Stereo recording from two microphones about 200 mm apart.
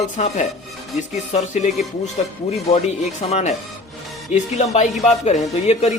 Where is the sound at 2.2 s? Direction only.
35° left (ahead or behind).